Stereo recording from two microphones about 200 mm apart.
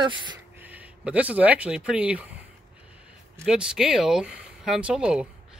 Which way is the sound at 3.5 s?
5° right (ahead or behind).